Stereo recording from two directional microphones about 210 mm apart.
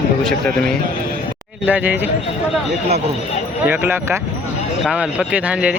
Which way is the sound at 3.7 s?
10° right (ahead or behind).